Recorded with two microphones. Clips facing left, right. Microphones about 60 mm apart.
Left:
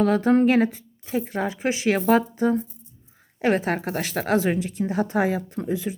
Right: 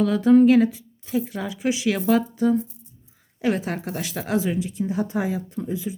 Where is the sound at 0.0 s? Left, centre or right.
Left.